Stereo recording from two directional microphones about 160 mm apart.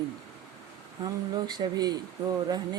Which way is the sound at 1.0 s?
25° right (ahead or behind).